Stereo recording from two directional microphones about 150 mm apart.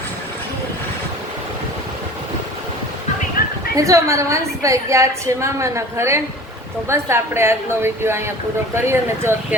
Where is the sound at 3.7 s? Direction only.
20° right (ahead or behind).